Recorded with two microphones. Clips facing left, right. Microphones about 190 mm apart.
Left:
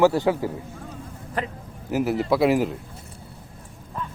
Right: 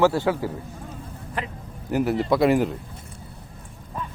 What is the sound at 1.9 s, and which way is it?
Speech, 5° left (ahead or behind).